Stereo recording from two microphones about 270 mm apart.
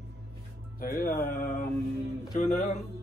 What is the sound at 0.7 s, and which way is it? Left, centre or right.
Speech, left.